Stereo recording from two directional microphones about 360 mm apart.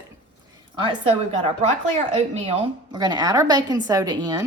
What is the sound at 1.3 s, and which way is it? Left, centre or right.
Speech, centre.